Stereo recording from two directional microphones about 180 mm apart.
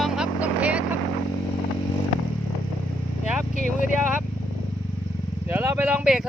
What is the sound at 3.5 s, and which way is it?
Vehicle, 45° left (ahead or behind).